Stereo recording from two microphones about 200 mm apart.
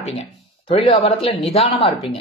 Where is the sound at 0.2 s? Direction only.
25° left (ahead or behind).